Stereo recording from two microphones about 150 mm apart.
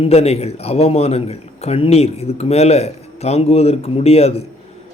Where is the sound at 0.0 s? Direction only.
40° left (ahead or behind).